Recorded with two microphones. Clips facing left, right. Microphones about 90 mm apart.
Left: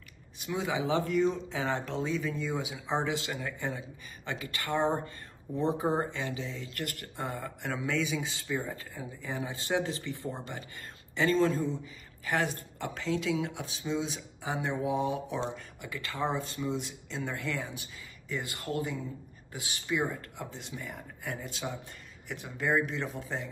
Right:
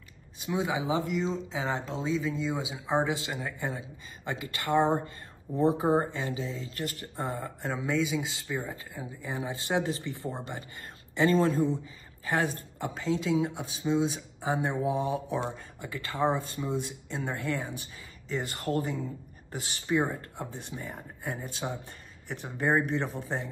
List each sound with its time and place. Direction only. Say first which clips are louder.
0.5 s speech: right 1 dB; 20° right (ahead or behind)
6.1 s speech: right 2 dB; 35° right (ahead or behind)
14.9 s speech: right 1 dB; 35° right (ahead or behind)